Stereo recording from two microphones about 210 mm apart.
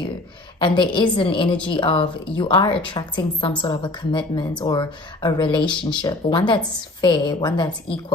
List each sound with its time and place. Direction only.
0.6 s a woman's voice: 20° left (ahead or behind)